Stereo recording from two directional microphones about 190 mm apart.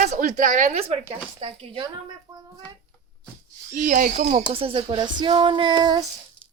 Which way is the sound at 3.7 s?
40° right (ahead or behind).